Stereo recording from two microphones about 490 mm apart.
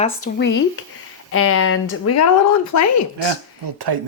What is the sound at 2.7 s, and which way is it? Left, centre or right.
Speech, left.